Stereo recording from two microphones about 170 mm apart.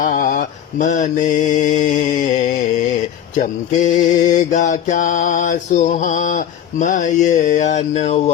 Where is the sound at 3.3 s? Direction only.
45° left (ahead or behind).